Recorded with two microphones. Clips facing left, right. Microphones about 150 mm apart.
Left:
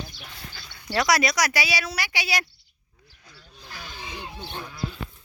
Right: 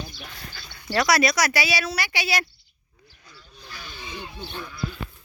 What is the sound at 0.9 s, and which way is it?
Speech, 20° left (ahead or behind).